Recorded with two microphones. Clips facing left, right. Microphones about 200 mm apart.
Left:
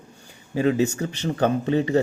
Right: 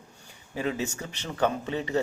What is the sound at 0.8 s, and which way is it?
Speech, 35° left (ahead or behind).